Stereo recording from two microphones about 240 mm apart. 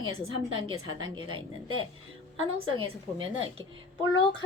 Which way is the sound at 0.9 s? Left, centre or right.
Centre.